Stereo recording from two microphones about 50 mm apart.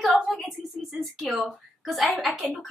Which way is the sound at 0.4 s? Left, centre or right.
Centre.